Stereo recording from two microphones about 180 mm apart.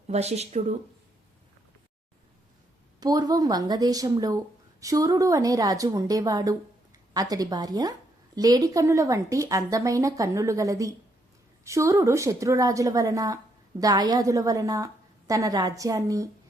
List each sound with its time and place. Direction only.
0.1 s speech: 35° right (ahead or behind)
3.0 s a woman's voice: 20° right (ahead or behind)